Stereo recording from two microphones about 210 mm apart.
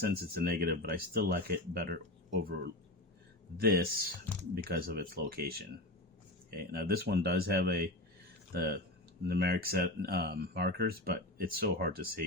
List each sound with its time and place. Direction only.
0.0 s speech: 45° right (ahead or behind)